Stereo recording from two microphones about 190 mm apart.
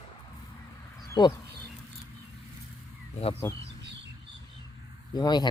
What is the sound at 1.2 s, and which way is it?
Speech, 25° left (ahead or behind).